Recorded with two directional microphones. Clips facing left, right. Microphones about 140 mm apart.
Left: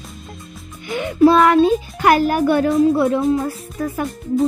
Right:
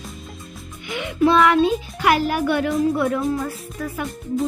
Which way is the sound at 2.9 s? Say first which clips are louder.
Left 4 dB; 25° left (ahead or behind).